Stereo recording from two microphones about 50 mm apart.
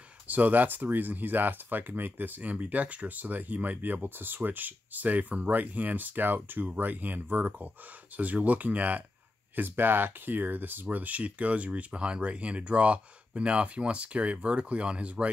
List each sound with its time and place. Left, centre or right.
0.3 s speech: right
2.5 s speech: right
9.6 s speech: right